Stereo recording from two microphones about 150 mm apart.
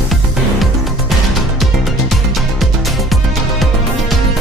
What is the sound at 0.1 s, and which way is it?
Music, centre (ahead or behind).